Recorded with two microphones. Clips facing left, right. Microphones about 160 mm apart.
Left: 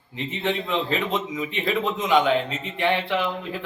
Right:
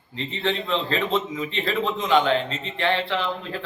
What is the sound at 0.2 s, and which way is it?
A man's voice, 15° left (ahead or behind).